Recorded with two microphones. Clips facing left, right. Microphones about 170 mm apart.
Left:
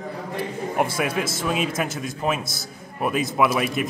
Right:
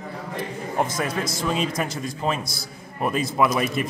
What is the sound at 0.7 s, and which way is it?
A man's voice, 10° left (ahead or behind).